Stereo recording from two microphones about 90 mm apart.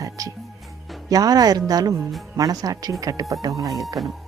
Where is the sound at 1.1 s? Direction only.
45° right (ahead or behind).